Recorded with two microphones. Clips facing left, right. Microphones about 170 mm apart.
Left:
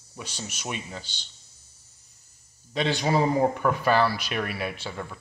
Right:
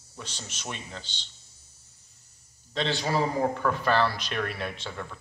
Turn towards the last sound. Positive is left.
turn(degrees=10)  # may be behind; listen again after turning